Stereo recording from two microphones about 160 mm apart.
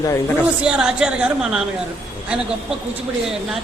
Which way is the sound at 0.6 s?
5° right (ahead or behind).